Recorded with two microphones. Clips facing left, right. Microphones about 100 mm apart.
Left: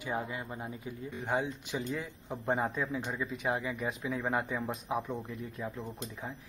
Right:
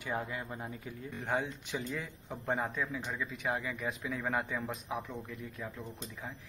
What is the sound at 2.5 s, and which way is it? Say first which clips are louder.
Speech: left 3 dB; 30° left (ahead or behind).